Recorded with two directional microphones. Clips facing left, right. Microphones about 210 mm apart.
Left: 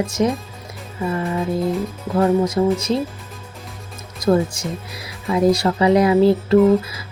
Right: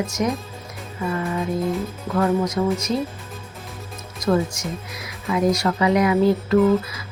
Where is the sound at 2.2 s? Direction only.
30° left (ahead or behind).